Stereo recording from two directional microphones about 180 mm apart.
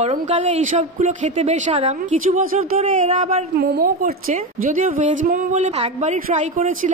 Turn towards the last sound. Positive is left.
turn(degrees=-45)  # may be behind; listen again after turning